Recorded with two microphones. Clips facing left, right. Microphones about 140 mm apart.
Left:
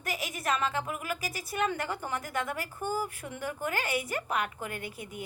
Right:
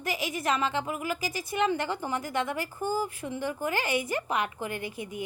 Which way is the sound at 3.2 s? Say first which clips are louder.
Right 4 dB; 5° right (ahead or behind).